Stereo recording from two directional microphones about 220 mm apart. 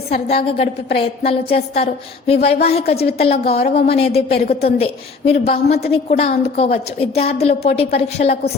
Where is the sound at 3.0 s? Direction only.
25° left (ahead or behind).